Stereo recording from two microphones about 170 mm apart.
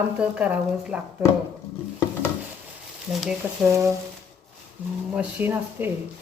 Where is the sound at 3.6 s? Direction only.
15° right (ahead or behind).